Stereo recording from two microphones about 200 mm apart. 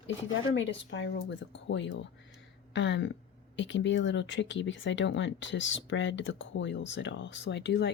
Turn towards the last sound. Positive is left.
turn(degrees=60)  # may be behind; listen again after turning